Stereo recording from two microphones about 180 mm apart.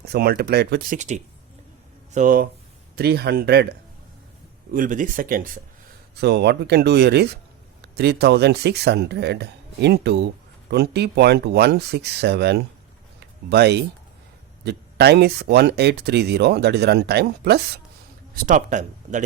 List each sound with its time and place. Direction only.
0.0 s speech: 60° right (ahead or behind)
2.9 s speech: 60° right (ahead or behind)
4.7 s speech: 45° right (ahead or behind)
6.1 s speech: 70° right (ahead or behind)
13.1 s a sound: 65° right (ahead or behind)
14.6 s speech: 65° right (ahead or behind)
18.3 s speech: 45° right (ahead or behind)